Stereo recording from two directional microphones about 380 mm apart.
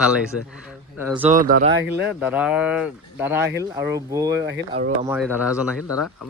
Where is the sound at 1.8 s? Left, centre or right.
Centre.